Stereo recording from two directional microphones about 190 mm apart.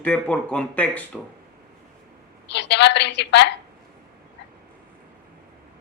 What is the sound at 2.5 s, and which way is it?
A man's voice, 65° left (ahead or behind).